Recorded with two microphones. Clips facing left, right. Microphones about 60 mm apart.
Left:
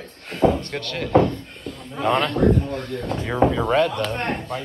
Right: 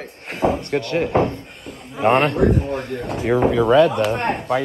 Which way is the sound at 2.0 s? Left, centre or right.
Right.